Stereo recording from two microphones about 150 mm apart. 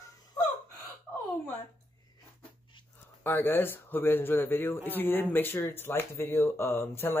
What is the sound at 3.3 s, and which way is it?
Speech, 15° left (ahead or behind).